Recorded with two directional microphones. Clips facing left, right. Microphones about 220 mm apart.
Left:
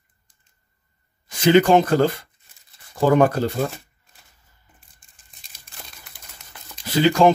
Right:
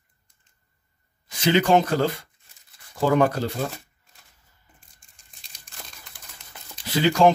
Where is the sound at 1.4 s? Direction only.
50° left (ahead or behind).